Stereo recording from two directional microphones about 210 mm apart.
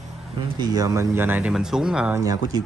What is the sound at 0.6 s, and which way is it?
Speech, 20° right (ahead or behind).